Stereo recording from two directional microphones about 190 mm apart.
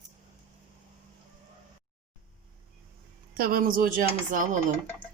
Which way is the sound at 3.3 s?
50° right (ahead or behind).